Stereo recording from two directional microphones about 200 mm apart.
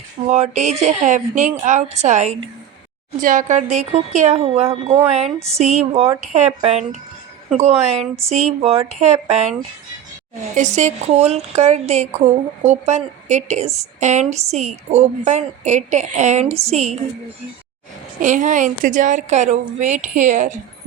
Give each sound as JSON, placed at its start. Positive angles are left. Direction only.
{"t": 0.3, "sound": "a woman's voice", "side_deg": -35}
{"t": 10.5, "sound": "a woman's voice", "side_deg": -35}
{"t": 18.2, "sound": "a woman's voice", "side_deg": -40}